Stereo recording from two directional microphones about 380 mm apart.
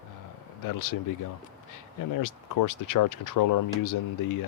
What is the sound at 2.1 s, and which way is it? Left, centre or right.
Speech, left.